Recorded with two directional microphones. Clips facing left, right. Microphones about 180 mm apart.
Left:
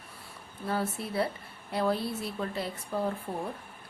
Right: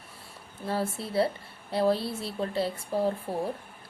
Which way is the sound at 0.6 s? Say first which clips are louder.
Right 1 dB; 30° right (ahead or behind).